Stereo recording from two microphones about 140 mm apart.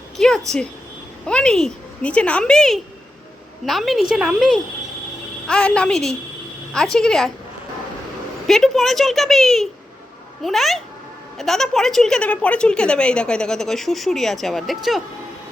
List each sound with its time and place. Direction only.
0.2 s a sound: 5° left (ahead or behind)
1.3 s a woman's voice: 5° left (ahead or behind)
8.4 s a woman's voice: centre (ahead or behind)